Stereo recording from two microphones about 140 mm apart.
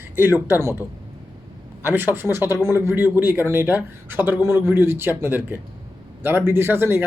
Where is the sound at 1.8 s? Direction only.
15° right (ahead or behind).